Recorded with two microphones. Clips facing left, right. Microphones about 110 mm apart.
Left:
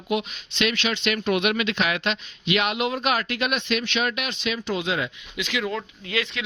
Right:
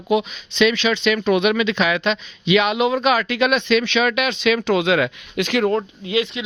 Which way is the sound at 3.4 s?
90° right.